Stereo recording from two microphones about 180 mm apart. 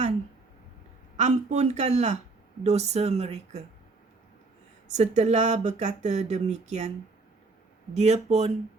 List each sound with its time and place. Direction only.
1.1 s speech: 40° right (ahead or behind)
4.9 s speech: 40° right (ahead or behind)
7.9 s speech: 35° right (ahead or behind)